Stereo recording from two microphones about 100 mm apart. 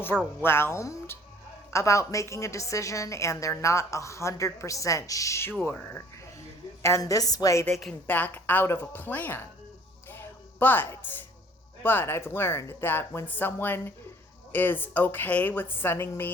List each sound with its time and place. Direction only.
0.1 s speech: 5° right (ahead or behind)
0.4 s speech: 25° left (ahead or behind)
8.0 s speech: 20° left (ahead or behind)
10.1 s a sound: 20° left (ahead or behind)
11.8 s speech: 20° left (ahead or behind)